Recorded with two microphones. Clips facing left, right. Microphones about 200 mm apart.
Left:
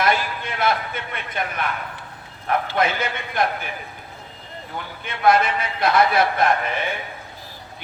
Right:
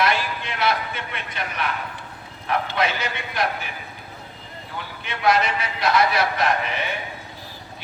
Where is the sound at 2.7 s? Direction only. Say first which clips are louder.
Left 2 dB; 50° left (ahead or behind).